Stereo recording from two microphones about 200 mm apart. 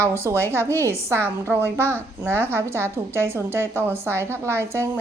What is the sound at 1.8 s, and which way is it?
Speech, 10° left (ahead or behind).